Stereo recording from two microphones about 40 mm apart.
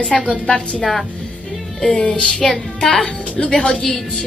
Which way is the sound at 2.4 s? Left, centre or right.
Centre.